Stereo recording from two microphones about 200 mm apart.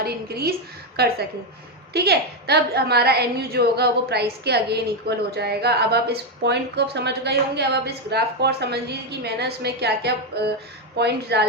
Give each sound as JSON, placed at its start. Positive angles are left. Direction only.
{"t": 0.0, "sound": "a woman's voice", "side_deg": -50}